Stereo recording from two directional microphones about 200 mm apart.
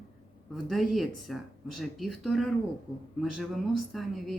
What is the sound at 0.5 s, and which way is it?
Speech, centre (ahead or behind).